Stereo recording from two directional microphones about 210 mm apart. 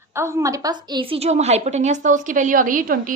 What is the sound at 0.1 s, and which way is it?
A woman's voice, 15° right (ahead or behind).